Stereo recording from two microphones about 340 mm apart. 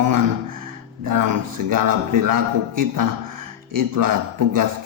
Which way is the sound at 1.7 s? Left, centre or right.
Right.